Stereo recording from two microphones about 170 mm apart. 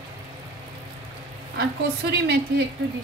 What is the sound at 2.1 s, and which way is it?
Speech, 75° right (ahead or behind).